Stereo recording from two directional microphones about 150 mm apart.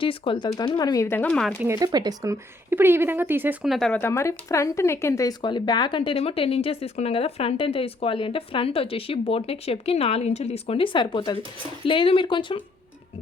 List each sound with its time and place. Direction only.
0.0 s speech: 35° left (ahead or behind); by 1.5 s 5° left (ahead or behind)
1.6 s speech: 20° right (ahead or behind); by 4.0 s 5° left (ahead or behind)
4.0 s speech: 15° left (ahead or behind); by 12.6 s 35° left (ahead or behind)